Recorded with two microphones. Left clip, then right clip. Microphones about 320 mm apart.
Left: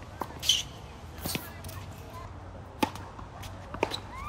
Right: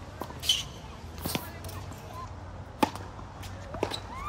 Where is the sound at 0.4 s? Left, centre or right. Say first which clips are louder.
Left 1 dB; centre.